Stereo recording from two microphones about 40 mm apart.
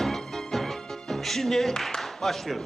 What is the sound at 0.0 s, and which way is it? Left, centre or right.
Music, centre.